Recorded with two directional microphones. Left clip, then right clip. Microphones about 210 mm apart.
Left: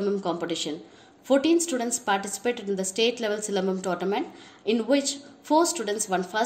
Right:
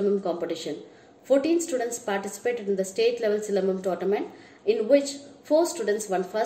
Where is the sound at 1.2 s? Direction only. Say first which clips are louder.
Left 1 dB; 40° left (ahead or behind).